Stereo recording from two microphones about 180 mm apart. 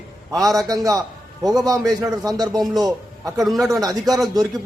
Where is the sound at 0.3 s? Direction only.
20° right (ahead or behind).